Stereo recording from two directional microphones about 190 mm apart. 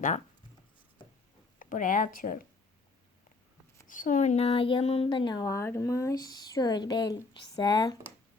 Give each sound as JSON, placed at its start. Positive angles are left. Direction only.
{"t": 1.5, "sound": "speech", "side_deg": 45}
{"t": 3.8, "sound": "a woman's voice", "side_deg": 45}